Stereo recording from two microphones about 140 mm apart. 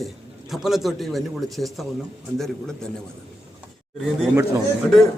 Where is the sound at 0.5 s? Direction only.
Centre (ahead or behind).